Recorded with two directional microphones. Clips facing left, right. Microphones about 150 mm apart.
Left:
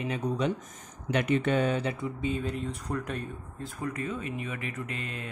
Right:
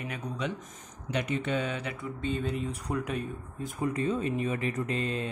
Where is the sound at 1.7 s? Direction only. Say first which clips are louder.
Left 5 dB; 30° left (ahead or behind).